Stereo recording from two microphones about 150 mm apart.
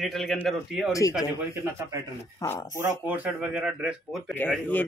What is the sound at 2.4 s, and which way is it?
Speech, 20° left (ahead or behind).